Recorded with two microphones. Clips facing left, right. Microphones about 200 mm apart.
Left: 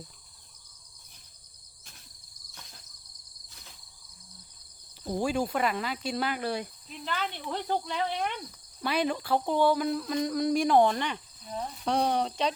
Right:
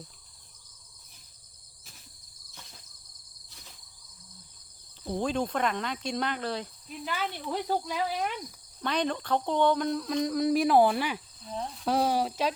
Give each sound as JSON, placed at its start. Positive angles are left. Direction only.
{"t": 5.0, "sound": "speech", "side_deg": 10}
{"t": 7.0, "sound": "speech", "side_deg": -10}
{"t": 8.8, "sound": "speech", "side_deg": 5}